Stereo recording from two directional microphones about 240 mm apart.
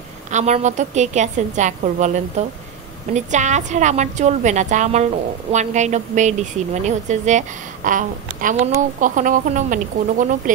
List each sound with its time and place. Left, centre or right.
0.3 s a woman's voice: right